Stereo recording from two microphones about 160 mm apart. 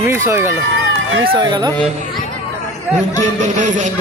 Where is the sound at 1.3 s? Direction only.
30° right (ahead or behind).